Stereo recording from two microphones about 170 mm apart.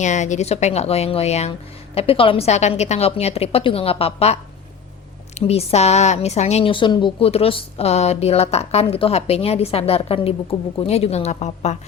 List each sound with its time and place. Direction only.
0.0 s a woman's voice: 45° left (ahead or behind)
5.5 s a woman's voice: 40° left (ahead or behind)